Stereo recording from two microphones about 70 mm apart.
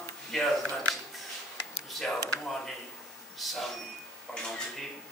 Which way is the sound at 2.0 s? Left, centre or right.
Centre.